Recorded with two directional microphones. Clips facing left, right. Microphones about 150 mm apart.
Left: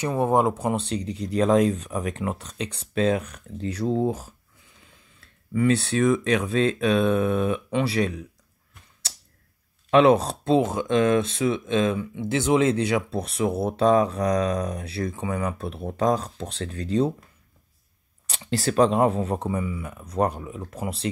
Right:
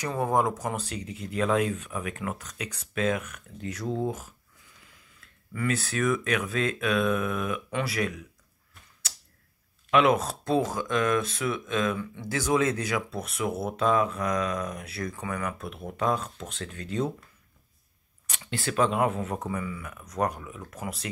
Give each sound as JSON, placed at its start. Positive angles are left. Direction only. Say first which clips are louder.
{"t": 0.0, "sound": "speech", "louder": "left 5 dB", "side_deg": 20}
{"t": 9.8, "sound": "speech", "louder": "left 5 dB", "side_deg": 30}
{"t": 18.2, "sound": "speech", "louder": "left 7 dB", "side_deg": 30}